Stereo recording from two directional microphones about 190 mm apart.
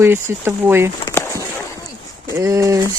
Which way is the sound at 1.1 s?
15° left (ahead or behind).